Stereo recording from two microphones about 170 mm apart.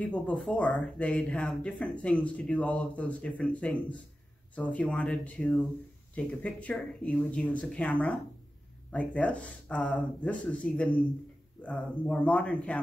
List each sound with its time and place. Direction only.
0.0 s speech: 5° left (ahead or behind)